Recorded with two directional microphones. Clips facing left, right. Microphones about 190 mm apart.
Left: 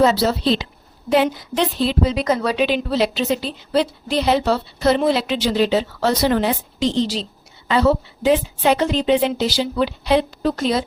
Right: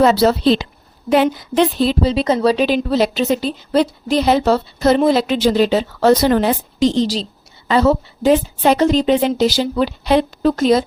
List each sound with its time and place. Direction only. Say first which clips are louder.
0.0 s a woman's voice: right 4 dB; 60° right (ahead or behind)
2.0 s a woman's voice: right 5 dB; 30° right (ahead or behind); by 10.8 s 45° right (ahead or behind)